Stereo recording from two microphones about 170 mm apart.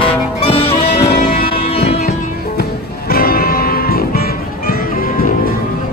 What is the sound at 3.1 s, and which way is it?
Music, 60° left (ahead or behind).